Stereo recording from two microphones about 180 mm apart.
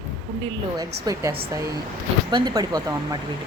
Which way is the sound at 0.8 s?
20° right (ahead or behind).